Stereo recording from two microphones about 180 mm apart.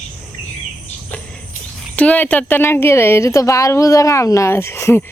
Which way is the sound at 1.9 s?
10° left (ahead or behind).